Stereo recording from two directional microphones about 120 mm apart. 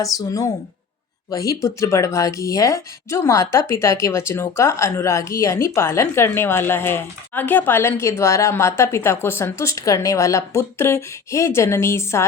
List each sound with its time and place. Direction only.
0.0 s speech: 30° left (ahead or behind)